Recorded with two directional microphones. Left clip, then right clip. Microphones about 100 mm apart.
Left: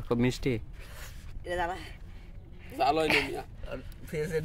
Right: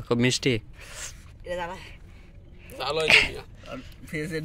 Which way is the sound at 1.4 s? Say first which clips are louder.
Even; 90° left.